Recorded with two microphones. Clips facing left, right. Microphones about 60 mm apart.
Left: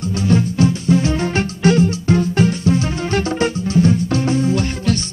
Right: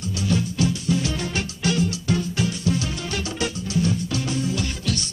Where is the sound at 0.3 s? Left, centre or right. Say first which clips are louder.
Left 7 dB; left.